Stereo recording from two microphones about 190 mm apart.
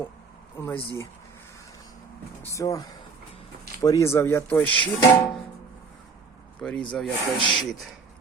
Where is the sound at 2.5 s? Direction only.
15° left (ahead or behind).